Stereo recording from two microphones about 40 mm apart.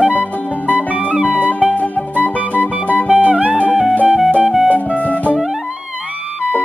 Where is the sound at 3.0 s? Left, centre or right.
Right.